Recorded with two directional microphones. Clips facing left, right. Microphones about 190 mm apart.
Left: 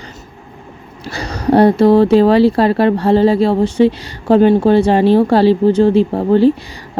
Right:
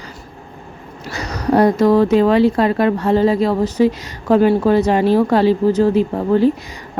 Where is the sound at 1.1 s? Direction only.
30° left (ahead or behind).